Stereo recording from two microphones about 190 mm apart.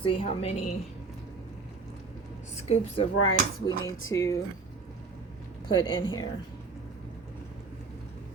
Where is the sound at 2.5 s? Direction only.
35° left (ahead or behind).